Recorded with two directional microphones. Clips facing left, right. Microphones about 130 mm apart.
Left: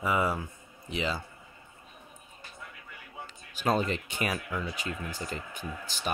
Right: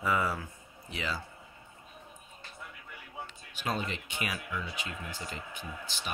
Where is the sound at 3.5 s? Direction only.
40° left (ahead or behind).